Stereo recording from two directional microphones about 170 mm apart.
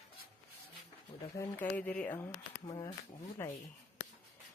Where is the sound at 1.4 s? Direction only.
15° left (ahead or behind).